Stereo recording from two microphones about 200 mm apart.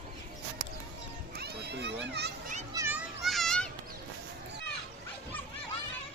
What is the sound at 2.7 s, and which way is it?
Children playing, 15° right (ahead or behind).